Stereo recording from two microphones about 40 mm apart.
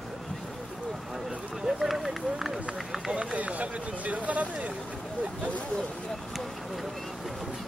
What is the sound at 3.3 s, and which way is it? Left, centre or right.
Speech, right.